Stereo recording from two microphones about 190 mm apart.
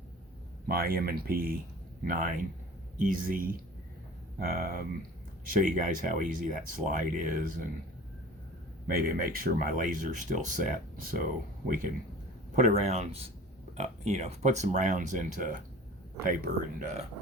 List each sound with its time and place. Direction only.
0.7 s speech: 50° right (ahead or behind)
8.9 s speech: 50° right (ahead or behind)
12.5 s speech: 35° right (ahead or behind)